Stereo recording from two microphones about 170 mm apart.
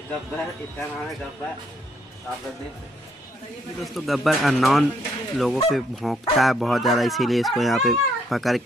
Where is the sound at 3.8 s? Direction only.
Centre (ahead or behind).